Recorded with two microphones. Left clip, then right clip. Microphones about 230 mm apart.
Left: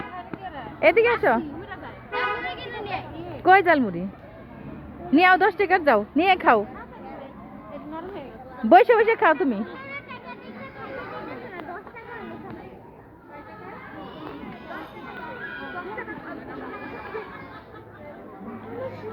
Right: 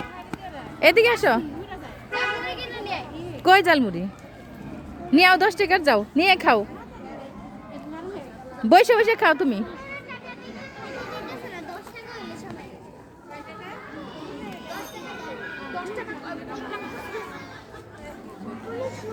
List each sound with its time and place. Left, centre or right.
0.8 s a woman's voice: centre
2.1 s children playing: centre
3.4 s a woman's voice: centre
5.1 s a woman's voice: centre
8.7 s a woman's voice: centre